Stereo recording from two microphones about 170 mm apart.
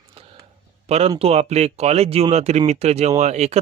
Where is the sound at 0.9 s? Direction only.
40° right (ahead or behind).